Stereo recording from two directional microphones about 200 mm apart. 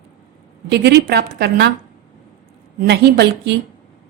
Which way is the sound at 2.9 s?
55° right (ahead or behind).